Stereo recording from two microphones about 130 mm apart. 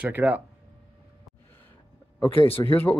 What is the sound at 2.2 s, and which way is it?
Speech, 45° left (ahead or behind).